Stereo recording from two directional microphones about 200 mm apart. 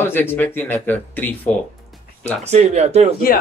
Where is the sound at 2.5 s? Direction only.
35° right (ahead or behind).